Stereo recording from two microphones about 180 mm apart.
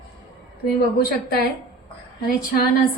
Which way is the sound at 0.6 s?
60° left (ahead or behind).